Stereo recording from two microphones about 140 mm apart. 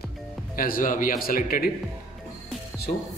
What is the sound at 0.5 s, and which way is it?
Speech, 85° left.